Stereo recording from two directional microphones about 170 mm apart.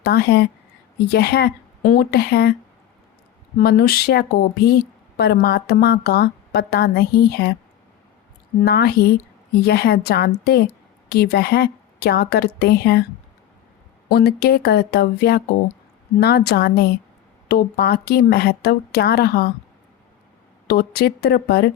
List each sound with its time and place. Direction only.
0.0 s a woman's voice: 70° left (ahead or behind)
3.6 s a woman's voice: 65° left (ahead or behind)
8.6 s a woman's voice: 70° left (ahead or behind)
14.1 s a woman's voice: 70° left (ahead or behind)
20.7 s speech: 65° left (ahead or behind)